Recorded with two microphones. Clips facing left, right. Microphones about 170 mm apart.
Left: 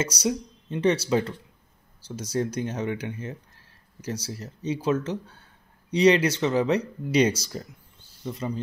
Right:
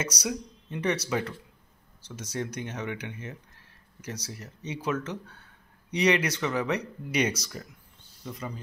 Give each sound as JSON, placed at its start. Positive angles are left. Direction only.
{"t": 0.0, "sound": "speech", "side_deg": 30}